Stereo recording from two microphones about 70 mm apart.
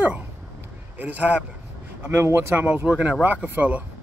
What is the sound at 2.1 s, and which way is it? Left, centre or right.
Speech, right.